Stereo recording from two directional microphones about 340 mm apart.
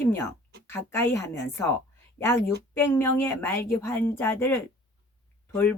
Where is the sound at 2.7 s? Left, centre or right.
Centre.